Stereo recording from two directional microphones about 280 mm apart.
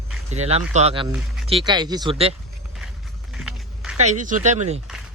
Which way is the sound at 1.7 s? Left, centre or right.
Centre.